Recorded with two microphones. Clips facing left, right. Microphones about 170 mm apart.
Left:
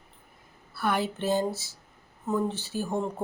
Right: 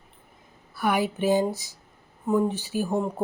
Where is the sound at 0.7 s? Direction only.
10° right (ahead or behind).